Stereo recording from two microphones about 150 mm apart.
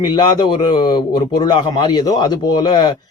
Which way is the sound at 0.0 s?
30° left (ahead or behind).